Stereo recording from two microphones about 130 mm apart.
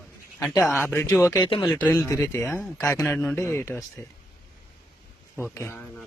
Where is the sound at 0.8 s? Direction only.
15° left (ahead or behind).